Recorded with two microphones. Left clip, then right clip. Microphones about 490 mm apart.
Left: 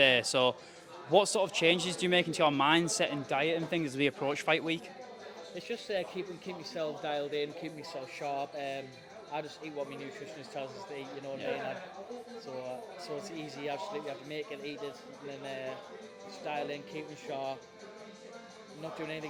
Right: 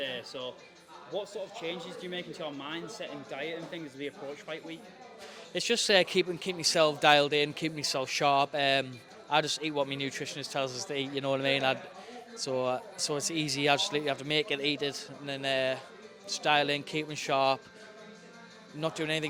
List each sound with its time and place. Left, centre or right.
0.0 s speech: left
5.5 s a man's voice: right
13.1 s a man's voice: right
18.8 s a man's voice: right